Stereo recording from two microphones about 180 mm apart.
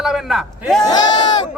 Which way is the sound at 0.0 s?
Centre (ahead or behind).